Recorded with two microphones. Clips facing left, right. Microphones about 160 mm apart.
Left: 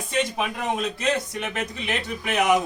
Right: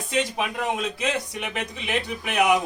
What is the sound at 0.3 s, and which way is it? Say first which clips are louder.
Speech: even; 5° right (ahead or behind).